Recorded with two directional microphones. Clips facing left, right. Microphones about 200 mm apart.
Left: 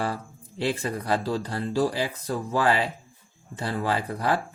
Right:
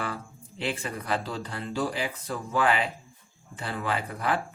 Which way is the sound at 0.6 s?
40° left (ahead or behind).